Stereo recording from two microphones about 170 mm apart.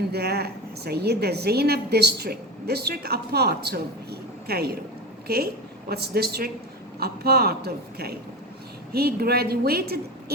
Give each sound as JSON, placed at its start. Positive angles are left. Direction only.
{"t": 0.1, "sound": "a woman's voice", "side_deg": -70}
{"t": 5.9, "sound": "a man's voice", "side_deg": -65}